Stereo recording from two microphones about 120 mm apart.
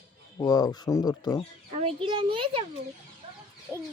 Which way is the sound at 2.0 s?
40° right (ahead or behind).